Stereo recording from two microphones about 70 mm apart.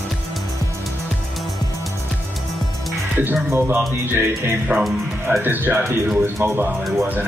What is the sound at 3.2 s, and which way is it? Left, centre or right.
Speech, right.